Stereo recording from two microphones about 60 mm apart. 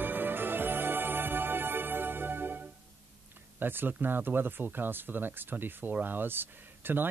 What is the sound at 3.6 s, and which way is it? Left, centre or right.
Speech, right.